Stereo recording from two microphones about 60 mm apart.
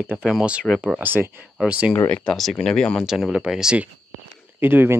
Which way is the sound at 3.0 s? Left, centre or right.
Centre.